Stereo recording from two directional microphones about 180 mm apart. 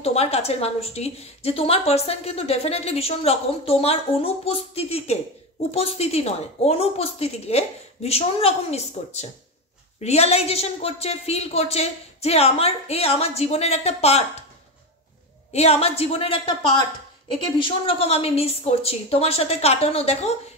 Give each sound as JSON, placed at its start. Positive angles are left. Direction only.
{"t": 0.0, "sound": "a woman's voice", "side_deg": 35}
{"t": 15.5, "sound": "a woman's voice", "side_deg": 35}